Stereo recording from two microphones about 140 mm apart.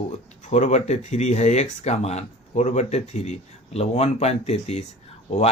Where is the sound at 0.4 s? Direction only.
60° left (ahead or behind).